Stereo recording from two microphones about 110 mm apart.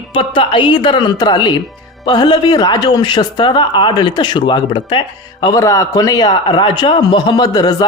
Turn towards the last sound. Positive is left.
turn(degrees=35)  # may be behind; listen again after turning